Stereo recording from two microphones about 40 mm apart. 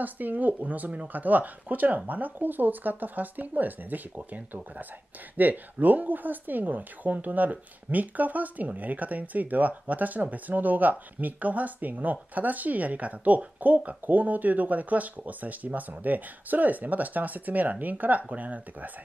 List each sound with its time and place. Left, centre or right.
0.0 s speech: right
5.4 s speech: right